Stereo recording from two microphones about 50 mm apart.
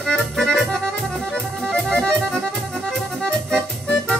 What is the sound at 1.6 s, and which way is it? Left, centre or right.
Music, centre.